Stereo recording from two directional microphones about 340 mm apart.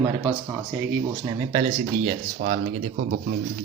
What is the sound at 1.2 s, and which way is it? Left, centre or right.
Speech, centre.